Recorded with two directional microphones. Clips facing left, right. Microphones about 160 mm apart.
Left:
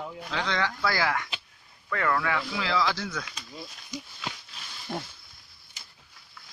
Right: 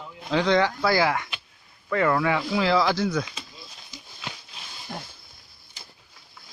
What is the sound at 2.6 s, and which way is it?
Speech, 35° right (ahead or behind).